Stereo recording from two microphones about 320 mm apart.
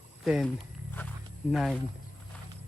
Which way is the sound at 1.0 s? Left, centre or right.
Centre.